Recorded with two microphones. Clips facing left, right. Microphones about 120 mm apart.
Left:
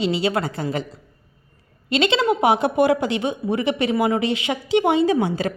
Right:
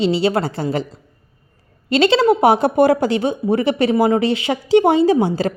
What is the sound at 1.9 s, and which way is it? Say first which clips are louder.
A woman's voice: right 5 dB; 35° right (ahead or behind).